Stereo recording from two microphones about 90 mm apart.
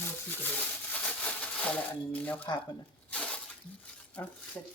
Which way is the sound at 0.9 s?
15° left (ahead or behind).